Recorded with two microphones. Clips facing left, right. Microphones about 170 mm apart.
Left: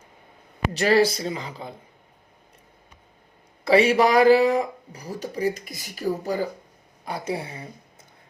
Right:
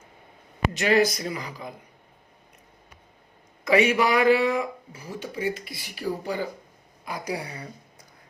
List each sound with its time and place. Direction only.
0.7 s speech: 35° left (ahead or behind)
3.6 s speech: 30° left (ahead or behind)
7.0 s speech: 30° left (ahead or behind)